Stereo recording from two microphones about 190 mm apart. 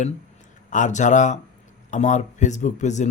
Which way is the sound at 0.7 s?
40° left (ahead or behind).